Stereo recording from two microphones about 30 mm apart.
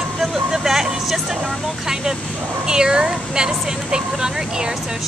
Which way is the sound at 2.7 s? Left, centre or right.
Right.